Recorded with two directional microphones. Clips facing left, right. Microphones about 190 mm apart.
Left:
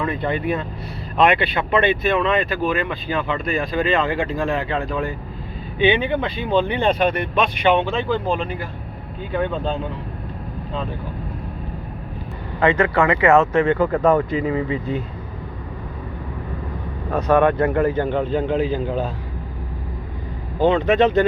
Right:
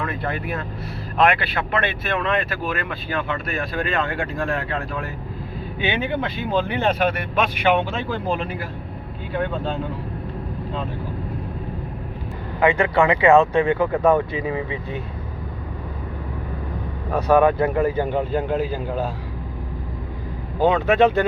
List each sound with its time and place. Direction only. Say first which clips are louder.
0.0 s speech: left 4 dB; centre (ahead or behind)
12.5 s speech: even; 15° right (ahead or behind)
17.1 s speech: even; 10° right (ahead or behind)
20.6 s speech: left 1 dB; 5° right (ahead or behind)